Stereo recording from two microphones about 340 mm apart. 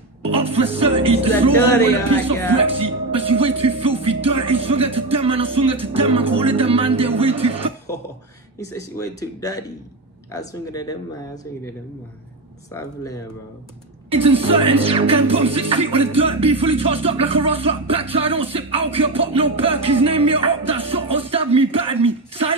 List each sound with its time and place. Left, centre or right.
0.2 s speech: centre
1.6 s speech: centre
2.5 s music: centre
8.5 s speech: centre
12.7 s speech: centre
14.1 s music: centre